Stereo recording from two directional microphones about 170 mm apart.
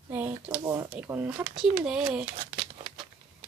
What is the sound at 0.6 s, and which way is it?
Speech, 15° right (ahead or behind).